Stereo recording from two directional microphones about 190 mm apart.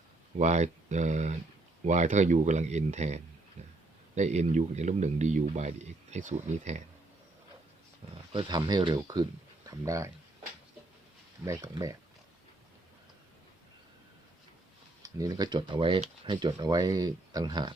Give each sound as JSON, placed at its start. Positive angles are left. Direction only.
{"t": 0.3, "sound": "speech", "side_deg": -35}
{"t": 8.3, "sound": "speech", "side_deg": -25}
{"t": 11.4, "sound": "speech", "side_deg": -15}
{"t": 15.0, "sound": "speech", "side_deg": -20}